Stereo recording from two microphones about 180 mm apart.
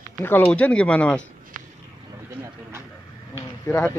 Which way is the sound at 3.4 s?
15° left (ahead or behind).